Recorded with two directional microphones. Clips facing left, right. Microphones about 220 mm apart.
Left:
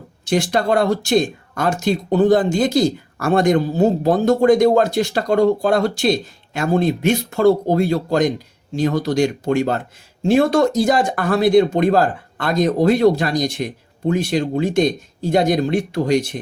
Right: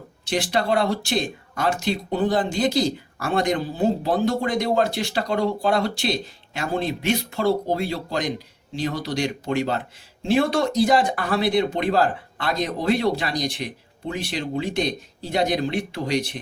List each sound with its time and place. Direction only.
0.3 s speech: 45° left (ahead or behind)